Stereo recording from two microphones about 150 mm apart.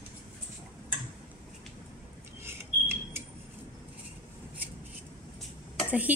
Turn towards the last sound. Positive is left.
turn(degrees=-10)  # may be behind; listen again after turning